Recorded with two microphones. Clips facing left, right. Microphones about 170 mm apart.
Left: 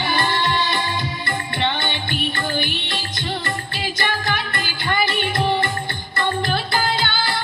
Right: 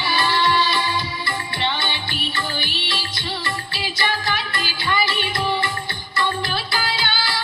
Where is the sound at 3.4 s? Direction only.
50° left (ahead or behind).